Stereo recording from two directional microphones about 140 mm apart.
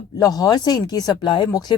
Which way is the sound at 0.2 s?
25° left (ahead or behind).